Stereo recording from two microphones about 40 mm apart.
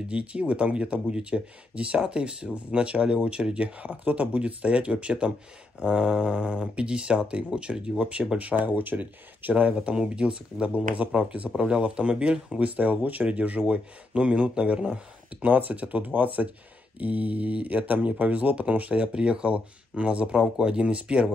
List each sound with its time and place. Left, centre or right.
0.1 s speech: right
12.5 s speech: right
15.4 s speech: right